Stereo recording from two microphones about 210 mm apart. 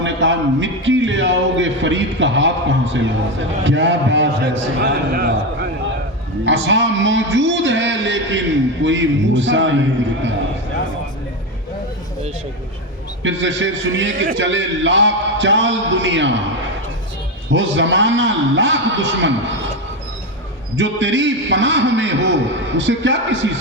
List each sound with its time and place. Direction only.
0.0 s a man's voice: 60° right (ahead or behind)
6.4 s a man's voice: 60° right (ahead or behind)
13.2 s a man's voice: 60° right (ahead or behind)
17.5 s a man's voice: 60° right (ahead or behind)
20.7 s a man's voice: 60° right (ahead or behind)